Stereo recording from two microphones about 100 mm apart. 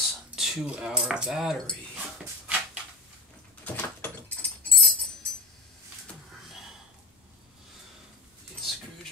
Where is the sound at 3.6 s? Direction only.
15° left (ahead or behind).